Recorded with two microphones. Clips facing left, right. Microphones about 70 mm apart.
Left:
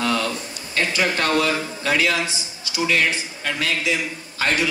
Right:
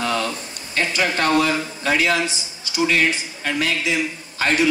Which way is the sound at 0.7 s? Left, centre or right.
Right.